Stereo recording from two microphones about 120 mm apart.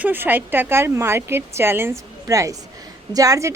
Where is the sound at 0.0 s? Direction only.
15° right (ahead or behind).